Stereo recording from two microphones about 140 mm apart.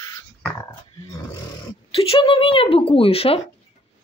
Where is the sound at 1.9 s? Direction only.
40° left (ahead or behind).